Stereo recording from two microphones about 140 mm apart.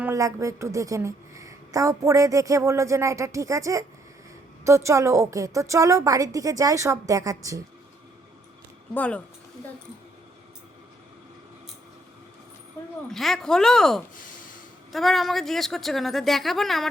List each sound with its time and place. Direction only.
0.0 s a woman's voice: 20° right (ahead or behind)
9.0 s speech: 10° left (ahead or behind)
13.1 s speech: centre (ahead or behind)